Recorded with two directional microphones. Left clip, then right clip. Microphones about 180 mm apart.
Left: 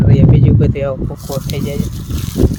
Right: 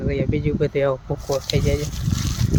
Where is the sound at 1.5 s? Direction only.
5° left (ahead or behind).